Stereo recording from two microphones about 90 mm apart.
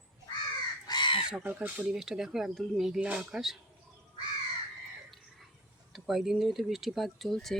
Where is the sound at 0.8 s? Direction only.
55° left (ahead or behind).